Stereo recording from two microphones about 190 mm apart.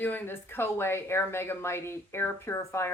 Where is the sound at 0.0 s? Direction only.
10° left (ahead or behind).